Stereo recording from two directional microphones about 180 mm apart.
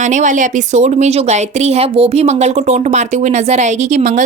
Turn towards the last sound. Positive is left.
turn(degrees=-45)  # may be behind; listen again after turning